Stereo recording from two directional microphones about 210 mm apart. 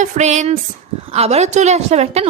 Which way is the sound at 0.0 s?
35° right (ahead or behind).